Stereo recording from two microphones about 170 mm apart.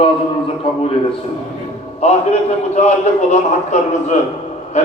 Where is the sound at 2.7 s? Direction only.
40° left (ahead or behind).